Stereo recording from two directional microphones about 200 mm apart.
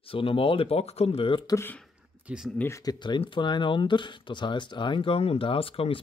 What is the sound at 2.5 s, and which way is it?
Speech, 15° left (ahead or behind).